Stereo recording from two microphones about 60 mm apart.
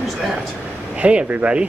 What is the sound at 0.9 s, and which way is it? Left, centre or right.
Speech, centre.